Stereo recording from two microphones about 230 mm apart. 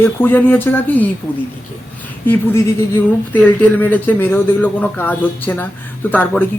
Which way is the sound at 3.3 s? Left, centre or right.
Centre.